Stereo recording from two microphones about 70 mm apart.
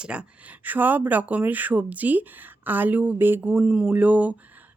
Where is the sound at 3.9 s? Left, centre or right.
Right.